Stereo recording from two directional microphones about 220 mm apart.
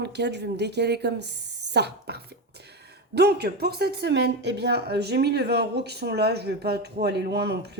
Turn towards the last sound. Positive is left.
turn(degrees=-50)  # may be behind; listen again after turning